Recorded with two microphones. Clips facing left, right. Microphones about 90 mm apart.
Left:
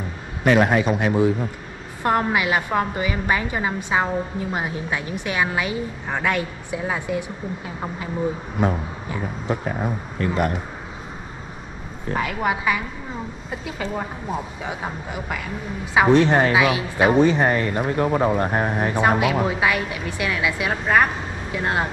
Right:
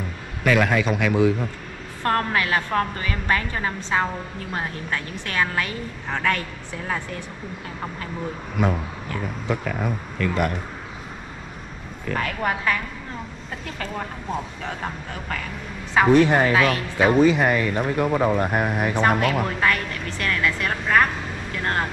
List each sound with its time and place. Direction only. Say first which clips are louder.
0.4 s speech: left 3 dB; 25° left (ahead or behind)
2.0 s a woman's voice: left 2 dB; 15° left (ahead or behind)
9.5 s speech: left 1 dB; 25° left (ahead or behind)
12.2 s a woman's voice: left 2 dB; 10° left (ahead or behind)
16.2 s speech: even; 20° left (ahead or behind)
16.5 s a woman's voice: left 1 dB; 10° left (ahead or behind)
17.2 s speech: even; 30° left (ahead or behind)
17.7 s a woman's voice: left 1 dB; 10° left (ahead or behind)
18.9 s a woman's voice: left 2 dB; 10° left (ahead or behind)